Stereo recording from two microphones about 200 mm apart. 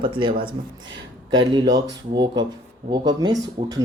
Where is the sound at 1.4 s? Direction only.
20° right (ahead or behind).